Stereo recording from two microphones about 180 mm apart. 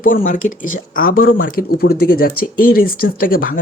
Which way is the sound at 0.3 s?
45° left (ahead or behind).